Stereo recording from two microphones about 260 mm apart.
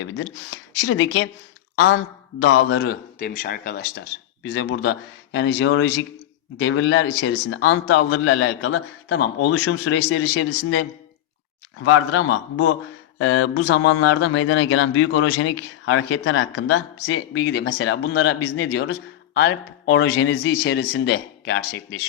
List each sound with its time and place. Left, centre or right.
0.0 s a man's voice: left
20.7 s speech: left